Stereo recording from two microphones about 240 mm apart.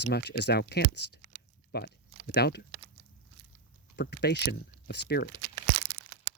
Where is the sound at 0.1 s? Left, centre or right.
Left.